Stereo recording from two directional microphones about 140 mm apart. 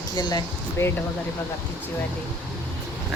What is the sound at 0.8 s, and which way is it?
Speech, 20° left (ahead or behind).